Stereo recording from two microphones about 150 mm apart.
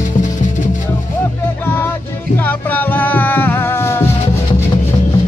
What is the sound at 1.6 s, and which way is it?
Music, 15° left (ahead or behind).